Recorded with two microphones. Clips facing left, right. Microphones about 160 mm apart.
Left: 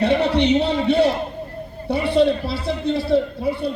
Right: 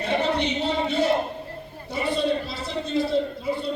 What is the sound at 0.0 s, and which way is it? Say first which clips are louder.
Music: left 6 dB; 70° left (ahead or behind).